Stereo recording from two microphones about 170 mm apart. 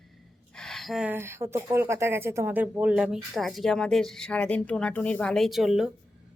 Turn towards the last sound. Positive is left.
turn(degrees=0)  # may be behind; listen again after turning